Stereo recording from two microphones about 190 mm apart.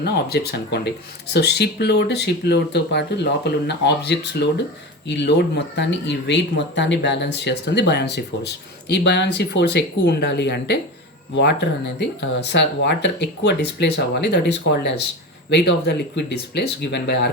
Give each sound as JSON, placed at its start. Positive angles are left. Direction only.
{"t": 0.0, "sound": "speech", "side_deg": 60}